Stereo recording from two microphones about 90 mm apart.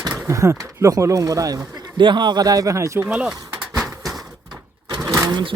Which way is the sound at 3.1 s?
10° right (ahead or behind).